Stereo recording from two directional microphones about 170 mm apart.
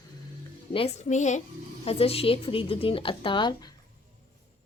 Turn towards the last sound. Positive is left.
turn(degrees=25)  # may be behind; listen again after turning